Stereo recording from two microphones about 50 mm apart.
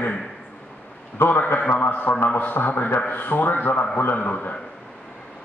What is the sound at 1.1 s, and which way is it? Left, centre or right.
A man's voice, left.